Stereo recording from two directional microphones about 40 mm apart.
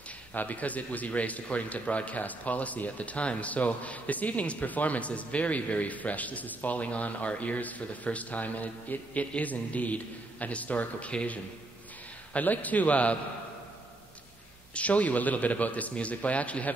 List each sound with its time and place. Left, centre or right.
0.3 s speech: left
12.4 s speech: left
14.7 s speech: left